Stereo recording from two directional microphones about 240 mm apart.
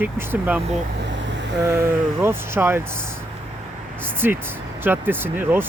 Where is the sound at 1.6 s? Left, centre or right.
Centre.